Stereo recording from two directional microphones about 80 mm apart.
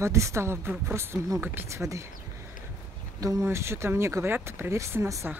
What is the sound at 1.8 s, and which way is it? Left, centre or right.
Speech, right.